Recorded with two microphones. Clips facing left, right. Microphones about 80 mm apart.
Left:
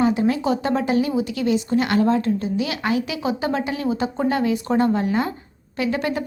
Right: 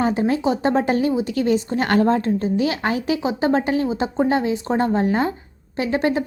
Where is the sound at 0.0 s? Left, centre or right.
Right.